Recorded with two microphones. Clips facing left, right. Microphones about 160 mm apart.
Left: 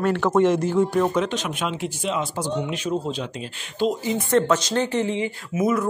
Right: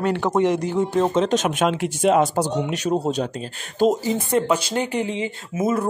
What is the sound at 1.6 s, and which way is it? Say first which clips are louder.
Speech: right 7 dB; 60° right (ahead or behind).